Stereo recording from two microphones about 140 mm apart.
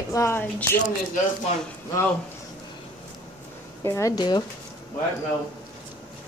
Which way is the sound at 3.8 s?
20° left (ahead or behind).